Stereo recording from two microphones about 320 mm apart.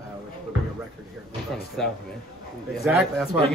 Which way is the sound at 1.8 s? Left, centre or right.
Centre.